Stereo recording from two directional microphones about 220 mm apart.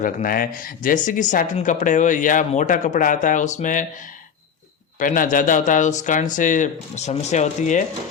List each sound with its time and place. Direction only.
0.0 s speech: 40° left (ahead or behind)
4.9 s speech: 40° left (ahead or behind)